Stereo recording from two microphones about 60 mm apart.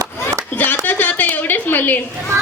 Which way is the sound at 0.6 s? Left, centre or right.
Left.